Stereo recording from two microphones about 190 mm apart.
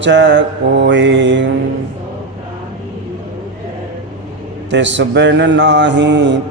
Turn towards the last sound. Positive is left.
turn(degrees=-70)  # may be behind; listen again after turning